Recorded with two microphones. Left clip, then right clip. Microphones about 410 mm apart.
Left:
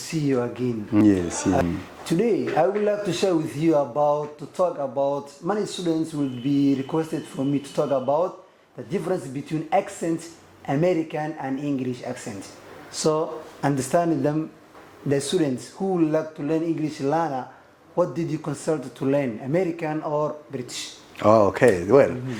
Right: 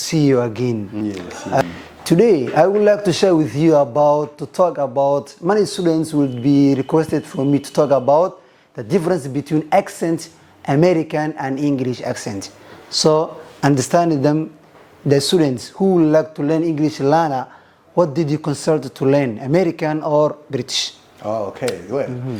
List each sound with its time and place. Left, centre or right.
0.1 s a man's voice: right
0.9 s speech: left
2.0 s a man's voice: right
21.2 s speech: left